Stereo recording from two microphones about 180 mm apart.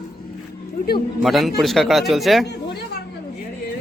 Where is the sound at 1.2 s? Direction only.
Centre (ahead or behind).